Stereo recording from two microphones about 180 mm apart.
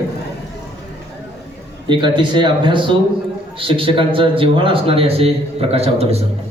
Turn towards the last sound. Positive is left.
turn(degrees=-35)  # may be behind; listen again after turning